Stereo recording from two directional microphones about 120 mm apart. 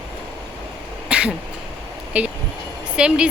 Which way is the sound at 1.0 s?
10° right (ahead or behind).